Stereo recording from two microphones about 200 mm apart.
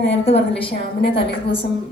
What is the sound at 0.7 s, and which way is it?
Speech, 60° left (ahead or behind).